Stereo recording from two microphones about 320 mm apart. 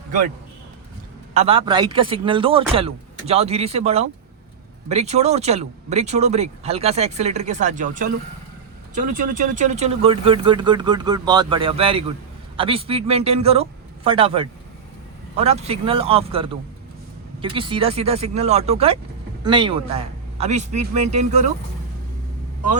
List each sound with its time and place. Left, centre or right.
1.3 s speech: centre